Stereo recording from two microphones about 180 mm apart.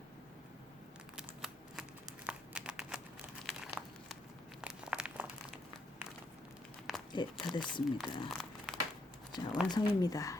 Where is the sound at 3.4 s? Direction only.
Centre (ahead or behind).